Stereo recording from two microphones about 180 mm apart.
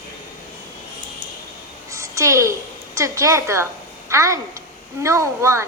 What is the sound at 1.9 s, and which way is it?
A woman's voice, 15° right (ahead or behind).